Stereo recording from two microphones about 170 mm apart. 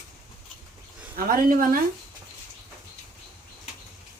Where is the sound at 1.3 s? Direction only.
55° right (ahead or behind).